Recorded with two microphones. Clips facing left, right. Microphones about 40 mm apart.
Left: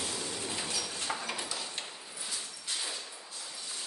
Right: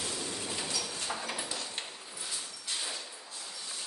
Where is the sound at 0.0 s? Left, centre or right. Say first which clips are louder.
Even; centre.